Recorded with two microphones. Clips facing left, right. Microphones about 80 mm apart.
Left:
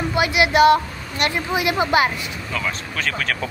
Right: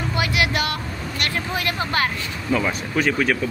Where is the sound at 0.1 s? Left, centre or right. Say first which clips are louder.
Left 5 dB; left.